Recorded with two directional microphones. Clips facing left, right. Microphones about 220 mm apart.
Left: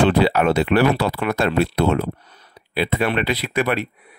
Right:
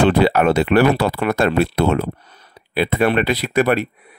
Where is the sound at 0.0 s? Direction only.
50° right (ahead or behind).